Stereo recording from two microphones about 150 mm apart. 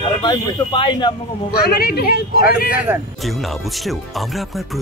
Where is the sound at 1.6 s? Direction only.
90° left.